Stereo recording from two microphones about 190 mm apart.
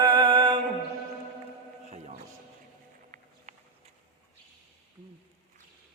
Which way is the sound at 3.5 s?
40° right (ahead or behind).